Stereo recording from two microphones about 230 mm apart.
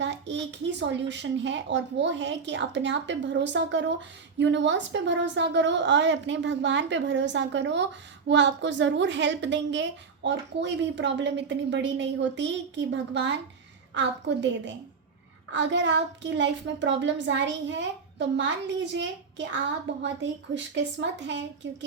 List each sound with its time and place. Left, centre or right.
0.0 s a woman's voice: right